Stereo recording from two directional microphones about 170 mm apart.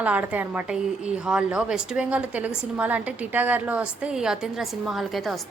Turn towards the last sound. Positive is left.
turn(degrees=0)  # may be behind; listen again after turning